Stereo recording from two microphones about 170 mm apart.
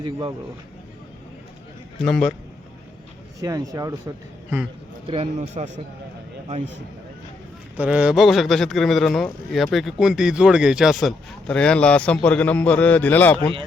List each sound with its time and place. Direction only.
0.0 s speech: 25° right (ahead or behind)
2.0 s speech: 5° left (ahead or behind)
3.4 s speech: 20° right (ahead or behind)
5.0 s a man's voice: 35° right (ahead or behind)
7.8 s speech: 5° right (ahead or behind); by 13.5 s 10° left (ahead or behind)